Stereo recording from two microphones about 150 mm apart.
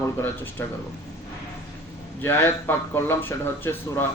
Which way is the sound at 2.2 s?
15° left (ahead or behind).